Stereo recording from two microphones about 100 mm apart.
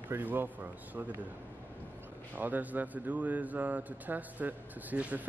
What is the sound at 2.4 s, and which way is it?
Speech, 15° right (ahead or behind).